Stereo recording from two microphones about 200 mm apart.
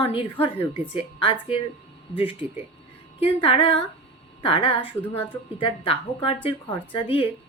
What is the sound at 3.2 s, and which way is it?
A woman's voice, 25° left (ahead or behind).